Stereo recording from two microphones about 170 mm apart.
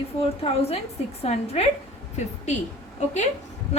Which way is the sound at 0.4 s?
30° left (ahead or behind).